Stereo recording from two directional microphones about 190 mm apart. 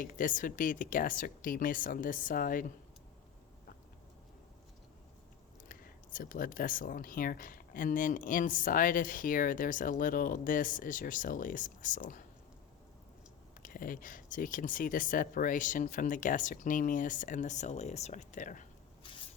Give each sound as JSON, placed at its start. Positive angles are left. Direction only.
{"t": 0.0, "sound": "speech", "side_deg": 45}
{"t": 5.6, "sound": "speech", "side_deg": 45}
{"t": 13.6, "sound": "speech", "side_deg": 45}